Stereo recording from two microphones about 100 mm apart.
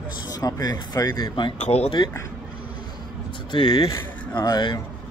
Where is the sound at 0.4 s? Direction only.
40° left (ahead or behind).